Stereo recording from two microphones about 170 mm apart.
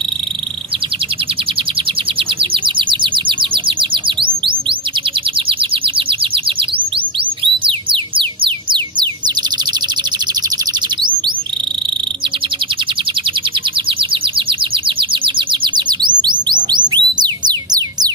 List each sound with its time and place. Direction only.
2.5 s bird: 30° right (ahead or behind)
7.6 s music: 30° right (ahead or behind)
15.0 s bird: 30° right (ahead or behind)